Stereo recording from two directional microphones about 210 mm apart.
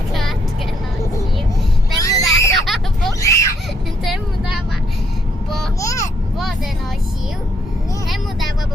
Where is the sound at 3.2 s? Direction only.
15° left (ahead or behind).